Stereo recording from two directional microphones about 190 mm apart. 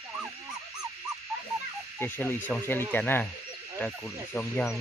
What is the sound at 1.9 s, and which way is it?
Speech, 10° left (ahead or behind).